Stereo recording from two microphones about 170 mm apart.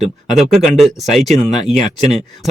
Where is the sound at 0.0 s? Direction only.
Centre (ahead or behind).